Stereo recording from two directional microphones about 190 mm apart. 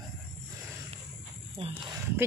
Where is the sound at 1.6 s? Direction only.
35° right (ahead or behind).